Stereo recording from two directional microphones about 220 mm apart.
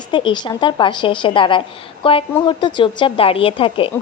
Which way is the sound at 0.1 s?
20° left (ahead or behind).